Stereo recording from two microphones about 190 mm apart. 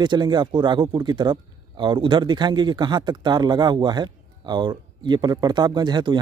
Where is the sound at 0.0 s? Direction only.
25° right (ahead or behind).